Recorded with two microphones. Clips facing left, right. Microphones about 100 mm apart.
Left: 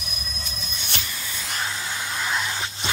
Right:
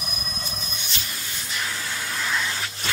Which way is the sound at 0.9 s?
65° left (ahead or behind).